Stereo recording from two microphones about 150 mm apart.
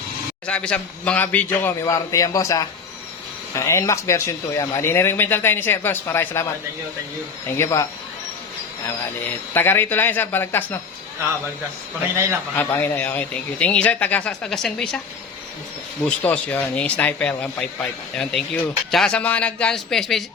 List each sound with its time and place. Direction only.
0.4 s speech: 5° left (ahead or behind)
1.8 s speech: 20° left (ahead or behind)
7.5 s speech: 20° left (ahead or behind)
9.6 s speech: 15° left (ahead or behind)
12.5 s speech: 15° left (ahead or behind)
16.0 s speech: 10° left (ahead or behind)